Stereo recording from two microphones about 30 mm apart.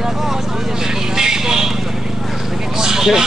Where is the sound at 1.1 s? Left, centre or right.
Right.